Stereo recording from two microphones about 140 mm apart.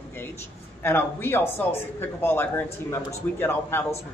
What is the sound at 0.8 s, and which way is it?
A woman's voice, 15° left (ahead or behind).